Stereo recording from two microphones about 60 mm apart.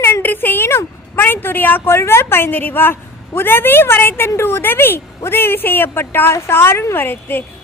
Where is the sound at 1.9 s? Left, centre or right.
Left.